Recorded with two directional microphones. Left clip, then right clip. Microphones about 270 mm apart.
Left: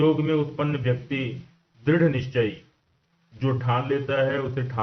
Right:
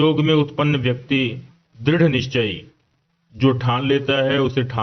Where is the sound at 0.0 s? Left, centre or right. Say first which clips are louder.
Right 5 dB; right.